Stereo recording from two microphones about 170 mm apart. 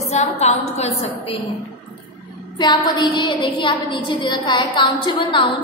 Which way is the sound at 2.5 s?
25° left (ahead or behind).